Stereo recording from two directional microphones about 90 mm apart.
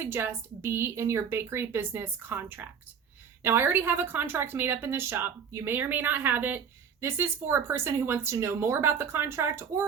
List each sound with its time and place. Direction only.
0.0 s a woman's voice: 25° right (ahead or behind)